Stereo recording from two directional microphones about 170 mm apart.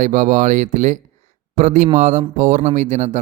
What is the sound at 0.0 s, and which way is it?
Speech, 45° right (ahead or behind).